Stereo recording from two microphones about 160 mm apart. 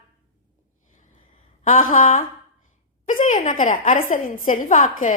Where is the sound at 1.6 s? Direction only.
55° left (ahead or behind).